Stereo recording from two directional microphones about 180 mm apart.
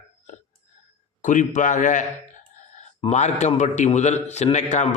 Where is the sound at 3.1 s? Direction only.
40° left (ahead or behind).